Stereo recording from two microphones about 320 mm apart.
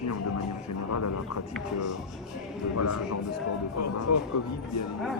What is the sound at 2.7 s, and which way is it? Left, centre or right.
Speech, left.